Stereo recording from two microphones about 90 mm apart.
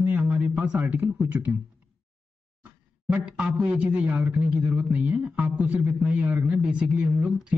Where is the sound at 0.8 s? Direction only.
20° right (ahead or behind).